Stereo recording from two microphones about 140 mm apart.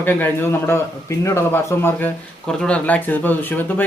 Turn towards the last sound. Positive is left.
turn(degrees=15)  # may be behind; listen again after turning